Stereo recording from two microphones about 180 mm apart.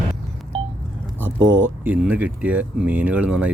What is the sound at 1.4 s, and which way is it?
Speech, 90° right.